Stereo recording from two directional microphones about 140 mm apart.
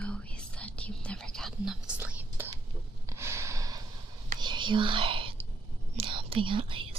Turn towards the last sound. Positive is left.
turn(degrees=-40)  # may be behind; listen again after turning